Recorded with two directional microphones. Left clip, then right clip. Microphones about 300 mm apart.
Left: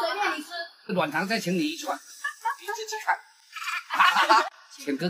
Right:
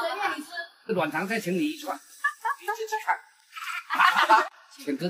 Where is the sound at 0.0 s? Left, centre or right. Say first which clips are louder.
Left 2 dB; centre.